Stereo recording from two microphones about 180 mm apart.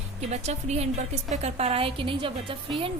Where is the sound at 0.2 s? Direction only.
40° right (ahead or behind).